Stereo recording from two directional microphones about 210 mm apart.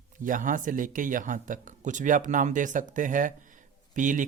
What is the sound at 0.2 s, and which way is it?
Speech, 40° right (ahead or behind).